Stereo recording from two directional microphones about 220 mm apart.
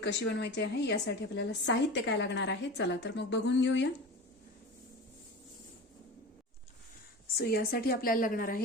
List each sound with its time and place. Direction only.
0.0 s a woman's voice: 55° left (ahead or behind)
7.3 s a woman's voice: 45° left (ahead or behind)